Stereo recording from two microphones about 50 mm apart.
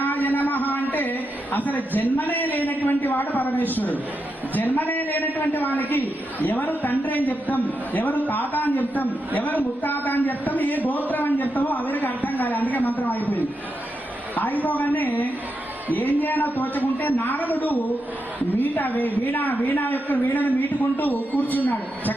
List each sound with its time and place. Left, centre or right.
0.0 s a man's voice: left